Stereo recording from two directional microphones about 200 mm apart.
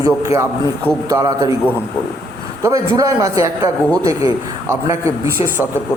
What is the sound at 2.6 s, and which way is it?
A man's voice, 15° right (ahead or behind).